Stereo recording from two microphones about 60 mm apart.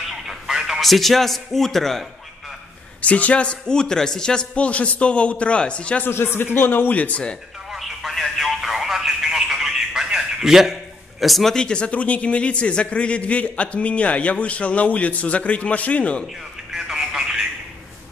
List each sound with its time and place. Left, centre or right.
0.1 s a man's voice: centre
3.0 s a man's voice: left
6.0 s speech: left; by 7.3 s centre
7.7 s telephone: centre
11.5 s a man's voice: centre
16.7 s telephone: centre